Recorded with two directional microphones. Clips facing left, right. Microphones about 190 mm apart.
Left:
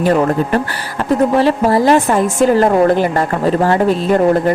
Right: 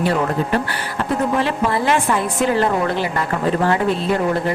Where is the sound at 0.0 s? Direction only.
45° left (ahead or behind).